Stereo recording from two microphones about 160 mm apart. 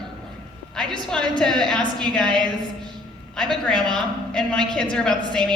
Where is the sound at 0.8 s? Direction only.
5° left (ahead or behind).